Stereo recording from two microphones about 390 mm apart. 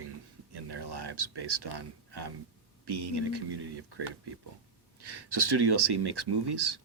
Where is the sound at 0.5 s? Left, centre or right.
Right.